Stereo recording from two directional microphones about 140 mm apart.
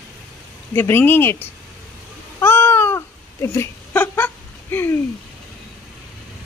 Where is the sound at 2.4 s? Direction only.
15° left (ahead or behind).